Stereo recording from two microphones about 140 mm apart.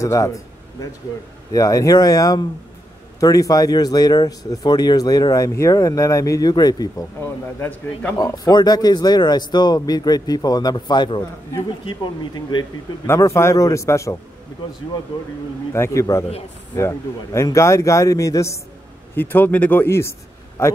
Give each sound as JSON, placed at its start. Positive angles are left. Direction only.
{"t": 0.0, "sound": "speech", "side_deg": 25}
{"t": 7.2, "sound": "a man's voice", "side_deg": 15}
{"t": 8.2, "sound": "speech", "side_deg": 30}
{"t": 13.0, "sound": "speech", "side_deg": 20}
{"t": 15.7, "sound": "a man's voice", "side_deg": 20}